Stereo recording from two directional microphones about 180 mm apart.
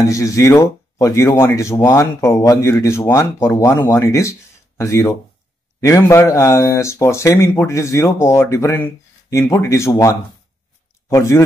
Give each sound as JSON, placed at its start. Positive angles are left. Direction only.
{"t": 0.0, "sound": "speech", "side_deg": 15}